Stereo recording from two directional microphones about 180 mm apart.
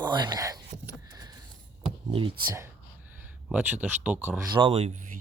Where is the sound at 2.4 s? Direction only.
25° right (ahead or behind).